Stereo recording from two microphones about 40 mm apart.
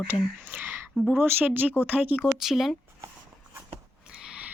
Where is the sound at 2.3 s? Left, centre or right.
Centre.